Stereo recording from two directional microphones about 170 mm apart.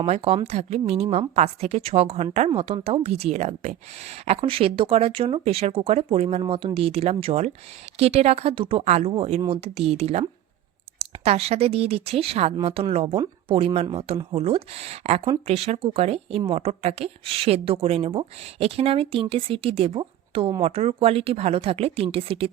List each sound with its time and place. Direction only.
0.0 s a woman's voice: 35° right (ahead or behind)